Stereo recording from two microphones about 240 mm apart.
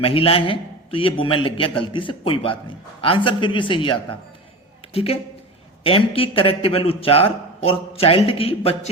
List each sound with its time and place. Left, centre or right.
0.0 s a man's voice: left